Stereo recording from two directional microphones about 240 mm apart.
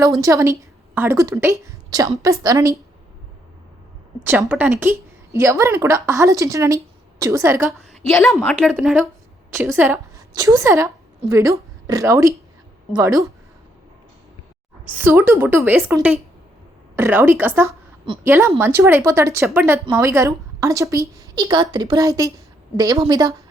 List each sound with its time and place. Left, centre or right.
0.0 s a woman's voice: centre
4.2 s a woman's voice: centre
8.1 s a woman's voice: centre
8.4 s a woman's voice: centre
14.8 s a woman's voice: centre
18.0 s a woman's voice: centre